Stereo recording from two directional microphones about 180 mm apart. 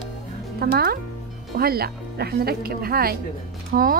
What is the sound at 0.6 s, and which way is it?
A woman's voice, 60° right (ahead or behind).